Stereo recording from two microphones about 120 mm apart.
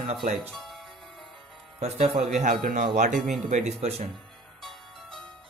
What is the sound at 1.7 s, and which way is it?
Speech, 60° right (ahead or behind).